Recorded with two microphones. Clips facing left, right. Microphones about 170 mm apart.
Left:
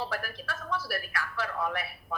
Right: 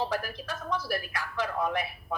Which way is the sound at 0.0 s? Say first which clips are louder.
Right 4 dB; 15° right (ahead or behind).